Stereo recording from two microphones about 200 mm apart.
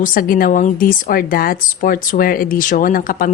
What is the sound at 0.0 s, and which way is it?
A woman's voice, 45° left (ahead or behind).